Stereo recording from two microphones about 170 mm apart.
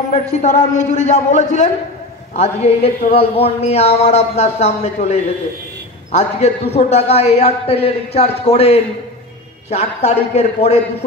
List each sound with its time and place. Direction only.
0.1 s a man's voice: 45° left (ahead or behind)